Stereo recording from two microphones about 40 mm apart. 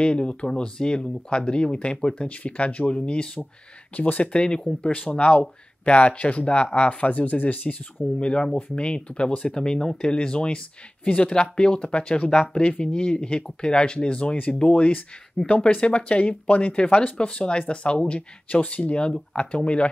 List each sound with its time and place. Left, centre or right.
0.0 s speech: left
2.2 s speech: left
3.9 s speech: left
8.2 s speech: left
15.4 s speech: left